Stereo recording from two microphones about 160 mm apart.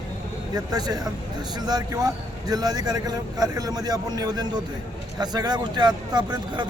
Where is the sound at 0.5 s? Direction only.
25° right (ahead or behind).